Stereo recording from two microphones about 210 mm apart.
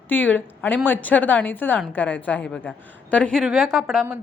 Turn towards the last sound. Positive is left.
turn(degrees=0)  # may be behind; listen again after turning